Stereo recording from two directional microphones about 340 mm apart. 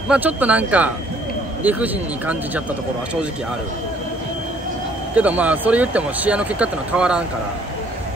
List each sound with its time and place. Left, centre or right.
0.1 s speech: centre
5.1 s speech: centre